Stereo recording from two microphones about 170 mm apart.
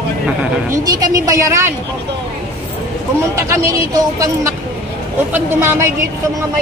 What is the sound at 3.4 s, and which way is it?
A woman's voice, 20° right (ahead or behind).